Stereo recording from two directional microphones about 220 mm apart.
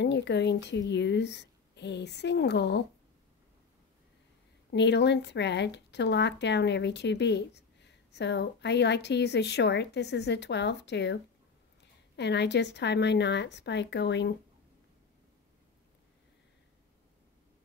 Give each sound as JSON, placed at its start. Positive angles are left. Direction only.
{"t": 0.0, "sound": "speech", "side_deg": 50}
{"t": 4.6, "sound": "speech", "side_deg": 50}